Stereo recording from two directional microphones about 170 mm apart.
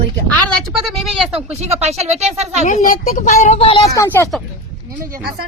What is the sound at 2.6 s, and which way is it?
Speech, 50° left (ahead or behind).